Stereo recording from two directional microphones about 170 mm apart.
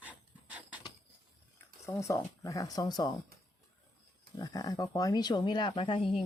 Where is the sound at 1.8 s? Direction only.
15° left (ahead or behind).